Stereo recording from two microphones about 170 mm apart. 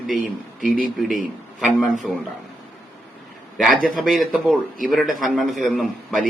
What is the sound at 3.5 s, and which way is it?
A man's voice, centre (ahead or behind).